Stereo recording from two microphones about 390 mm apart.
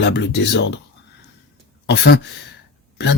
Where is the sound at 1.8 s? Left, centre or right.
Left.